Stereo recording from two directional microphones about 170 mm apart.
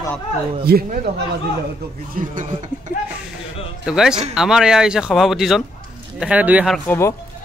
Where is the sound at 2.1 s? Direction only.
50° right (ahead or behind).